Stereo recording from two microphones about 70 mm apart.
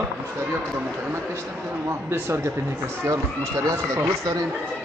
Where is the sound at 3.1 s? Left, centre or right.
Right.